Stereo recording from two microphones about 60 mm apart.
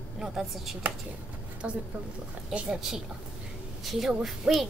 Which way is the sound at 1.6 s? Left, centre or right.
Right.